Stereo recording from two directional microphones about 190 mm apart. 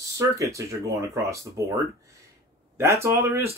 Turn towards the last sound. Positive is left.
turn(degrees=-15)  # may be behind; listen again after turning